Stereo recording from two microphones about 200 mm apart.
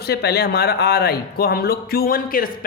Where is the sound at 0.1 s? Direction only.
55° left (ahead or behind).